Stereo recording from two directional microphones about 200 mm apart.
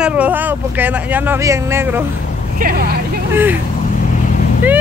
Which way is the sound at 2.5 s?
50° right (ahead or behind).